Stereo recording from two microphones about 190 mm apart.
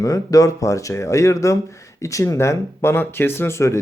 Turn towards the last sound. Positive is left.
turn(degrees=15)  # may be behind; listen again after turning